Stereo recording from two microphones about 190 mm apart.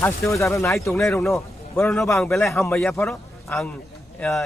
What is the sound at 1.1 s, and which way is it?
A man's voice, centre (ahead or behind).